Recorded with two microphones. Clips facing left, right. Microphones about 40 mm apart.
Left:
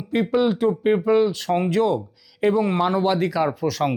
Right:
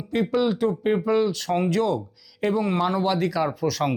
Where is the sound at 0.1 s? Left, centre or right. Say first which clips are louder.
Left 2 dB; centre.